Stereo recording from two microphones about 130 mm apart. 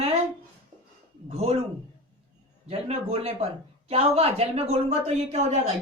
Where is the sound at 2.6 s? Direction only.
50° right (ahead or behind).